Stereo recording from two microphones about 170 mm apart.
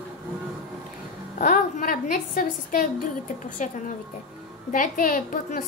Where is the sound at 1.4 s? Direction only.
50° left (ahead or behind).